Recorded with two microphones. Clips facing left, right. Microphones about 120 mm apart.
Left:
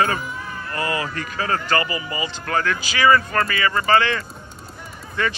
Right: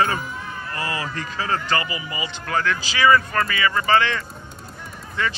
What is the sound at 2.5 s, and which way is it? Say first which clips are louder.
Speech: even; 25° left (ahead or behind).